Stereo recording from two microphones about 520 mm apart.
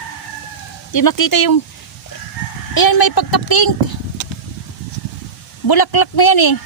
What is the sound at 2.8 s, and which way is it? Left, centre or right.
Speech, left.